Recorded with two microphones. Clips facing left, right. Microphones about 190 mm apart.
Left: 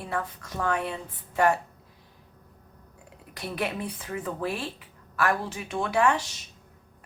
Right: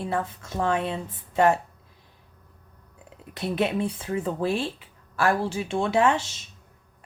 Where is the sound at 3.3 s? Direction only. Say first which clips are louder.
Right 6 dB; 25° right (ahead or behind).